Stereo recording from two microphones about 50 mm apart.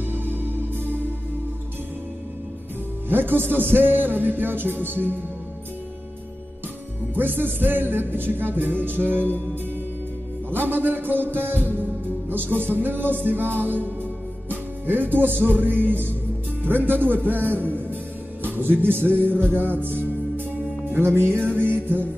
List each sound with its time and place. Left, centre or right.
0.1 s music: right
3.1 s music: right
7.2 s music: right
10.7 s music: right
20.9 s music: right